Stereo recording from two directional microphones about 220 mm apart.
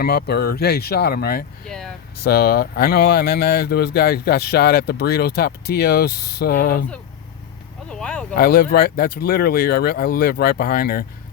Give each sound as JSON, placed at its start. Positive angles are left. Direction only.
{"t": 0.0, "sound": "speech", "side_deg": 45}
{"t": 1.6, "sound": "speech", "side_deg": 0}
{"t": 2.2, "sound": "speech", "side_deg": 45}
{"t": 7.9, "sound": "speech", "side_deg": 5}
{"t": 8.4, "sound": "speech", "side_deg": 45}